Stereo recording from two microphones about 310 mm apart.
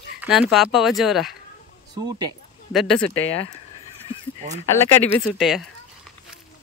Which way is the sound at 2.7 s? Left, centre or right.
Centre.